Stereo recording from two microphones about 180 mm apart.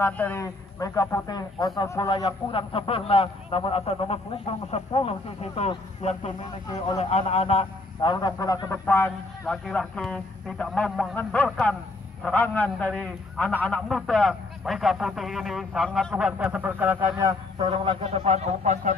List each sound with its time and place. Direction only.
0.0 s a man's voice: 10° left (ahead or behind); by 18.9 s 40° right (ahead or behind)